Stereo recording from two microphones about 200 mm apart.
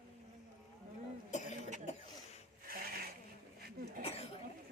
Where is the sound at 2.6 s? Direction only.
45° right (ahead or behind).